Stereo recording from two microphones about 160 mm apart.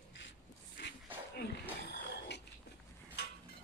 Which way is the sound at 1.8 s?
90° left.